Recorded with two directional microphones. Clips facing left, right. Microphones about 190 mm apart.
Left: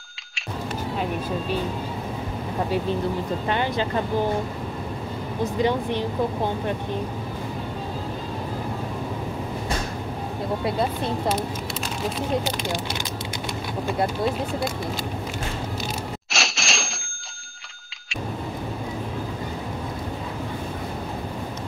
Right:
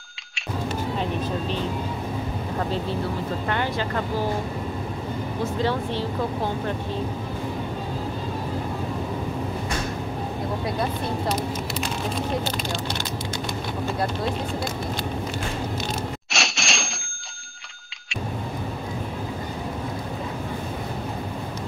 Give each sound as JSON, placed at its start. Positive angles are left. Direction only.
{"t": 3.4, "sound": "speech", "side_deg": 20}
{"t": 5.4, "sound": "speech", "side_deg": 15}
{"t": 16.3, "sound": "typewriter", "side_deg": 0}